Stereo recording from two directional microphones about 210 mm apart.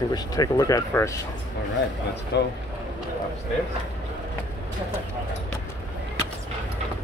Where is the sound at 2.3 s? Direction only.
55° left (ahead or behind).